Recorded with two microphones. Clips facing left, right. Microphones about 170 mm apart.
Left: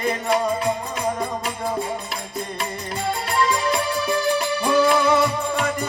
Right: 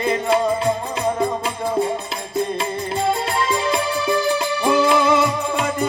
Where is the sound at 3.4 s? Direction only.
25° right (ahead or behind).